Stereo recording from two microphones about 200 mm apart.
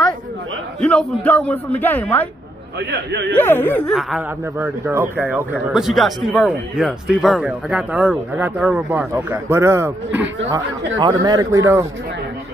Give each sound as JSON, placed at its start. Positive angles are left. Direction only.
{"t": 0.7, "sound": "a man's voice", "side_deg": 5}
{"t": 2.9, "sound": "a man's voice", "side_deg": -60}
{"t": 3.3, "sound": "a man's voice", "side_deg": 10}
{"t": 3.9, "sound": "speech", "side_deg": -5}